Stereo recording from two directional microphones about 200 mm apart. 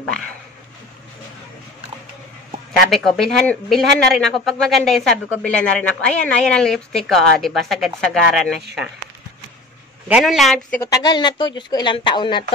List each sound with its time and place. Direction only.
2.9 s speech: centre (ahead or behind)
10.0 s speech: 5° right (ahead or behind)
10.8 s speech: 20° left (ahead or behind)